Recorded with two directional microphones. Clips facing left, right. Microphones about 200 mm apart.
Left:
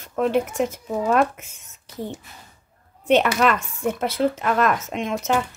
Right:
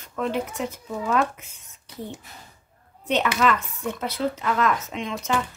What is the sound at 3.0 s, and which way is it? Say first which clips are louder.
Speech: left 4 dB; 60° left (ahead or behind).